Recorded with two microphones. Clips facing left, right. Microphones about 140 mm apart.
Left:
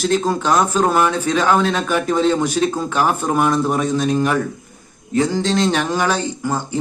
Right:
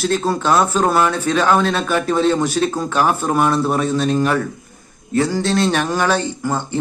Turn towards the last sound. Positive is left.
turn(degrees=15)  # may be behind; listen again after turning